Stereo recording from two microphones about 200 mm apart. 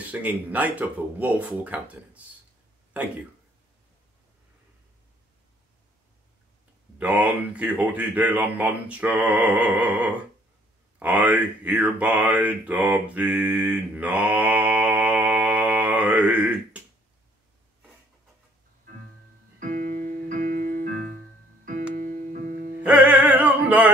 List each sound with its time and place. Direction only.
0.1 s speech: 10° right (ahead or behind)
7.0 s speech: 5° right (ahead or behind)
19.6 s keyboard: 45° right (ahead or behind)
21.6 s music: 40° right (ahead or behind)
22.8 s music: 5° right (ahead or behind)